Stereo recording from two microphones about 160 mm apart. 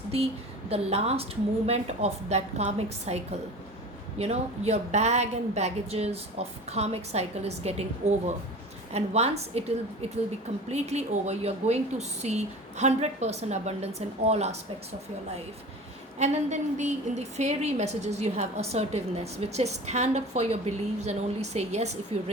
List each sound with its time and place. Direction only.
0.1 s a woman's voice: 40° right (ahead or behind)
8.9 s a woman's voice: 40° right (ahead or behind)
16.1 s a woman's voice: 45° right (ahead or behind)